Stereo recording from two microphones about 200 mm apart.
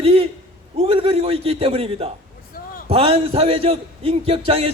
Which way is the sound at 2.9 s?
30° right (ahead or behind).